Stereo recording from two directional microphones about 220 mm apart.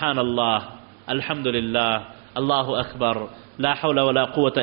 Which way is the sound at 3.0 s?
15° right (ahead or behind).